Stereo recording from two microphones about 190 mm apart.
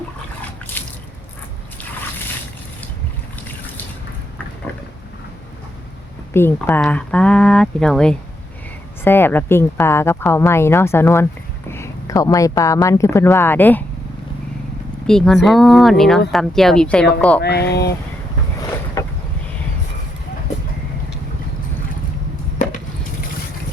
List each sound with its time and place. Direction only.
6.3 s speech: 10° left (ahead or behind)
15.0 s speech: 5° left (ahead or behind)
17.4 s speech: 60° left (ahead or behind)
19.0 s boat: 20° left (ahead or behind)